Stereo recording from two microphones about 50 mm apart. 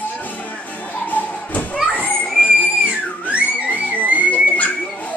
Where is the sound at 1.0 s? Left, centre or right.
Left.